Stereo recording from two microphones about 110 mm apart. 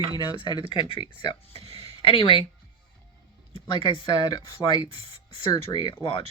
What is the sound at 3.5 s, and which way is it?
Speech, 45° left (ahead or behind).